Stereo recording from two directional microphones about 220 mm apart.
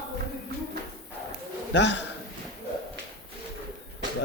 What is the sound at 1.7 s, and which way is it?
Speech, 55° left (ahead or behind).